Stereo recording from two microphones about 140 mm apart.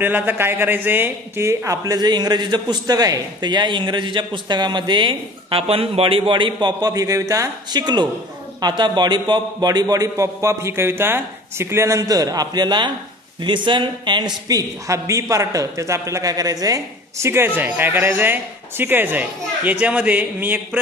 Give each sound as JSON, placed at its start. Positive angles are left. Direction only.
{"t": 0.0, "sound": "a man's voice", "side_deg": -15}